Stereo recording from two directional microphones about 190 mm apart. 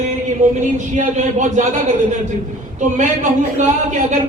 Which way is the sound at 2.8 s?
40° right (ahead or behind).